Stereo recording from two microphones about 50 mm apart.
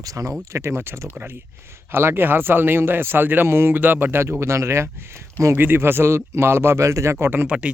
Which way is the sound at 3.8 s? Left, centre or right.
Right.